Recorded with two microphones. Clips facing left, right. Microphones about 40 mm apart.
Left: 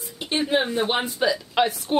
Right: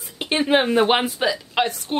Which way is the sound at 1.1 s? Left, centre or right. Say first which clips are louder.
Even; centre.